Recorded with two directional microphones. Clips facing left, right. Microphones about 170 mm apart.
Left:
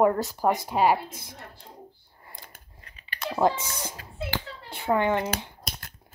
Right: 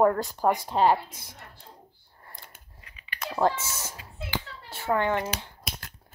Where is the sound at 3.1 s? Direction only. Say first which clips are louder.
Left 3 dB; 30° left (ahead or behind).